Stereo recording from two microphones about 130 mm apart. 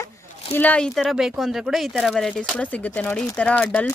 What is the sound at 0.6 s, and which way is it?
Speech, 10° left (ahead or behind).